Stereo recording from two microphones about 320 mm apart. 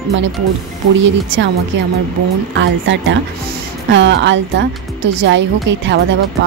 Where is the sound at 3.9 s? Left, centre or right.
Right.